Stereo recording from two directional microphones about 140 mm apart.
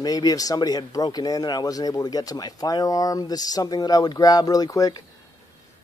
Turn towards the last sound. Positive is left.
turn(degrees=25)  # may be behind; listen again after turning